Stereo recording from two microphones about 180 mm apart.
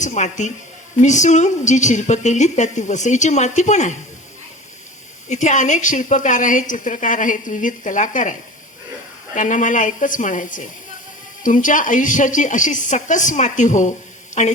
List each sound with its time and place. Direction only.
0.0 s a woman's voice: 40° left (ahead or behind)
5.3 s a woman's voice: 40° left (ahead or behind)